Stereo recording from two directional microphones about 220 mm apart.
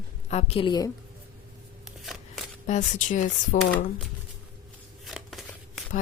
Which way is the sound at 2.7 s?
35° left (ahead or behind).